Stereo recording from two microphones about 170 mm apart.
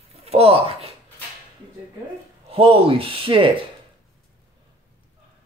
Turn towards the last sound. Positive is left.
turn(degrees=-30)  # may be behind; listen again after turning